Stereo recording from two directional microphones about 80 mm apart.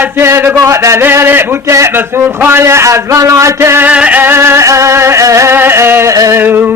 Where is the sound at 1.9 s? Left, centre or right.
Right.